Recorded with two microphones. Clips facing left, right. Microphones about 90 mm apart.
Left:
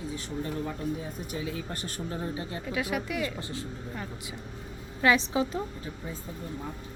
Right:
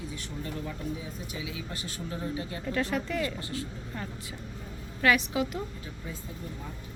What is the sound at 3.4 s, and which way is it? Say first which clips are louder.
Speech: right 1 dB; 25° left (ahead or behind).